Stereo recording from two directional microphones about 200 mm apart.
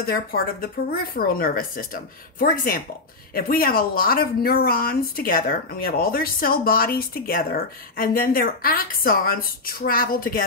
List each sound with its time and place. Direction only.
0.0 s speech: 50° left (ahead or behind)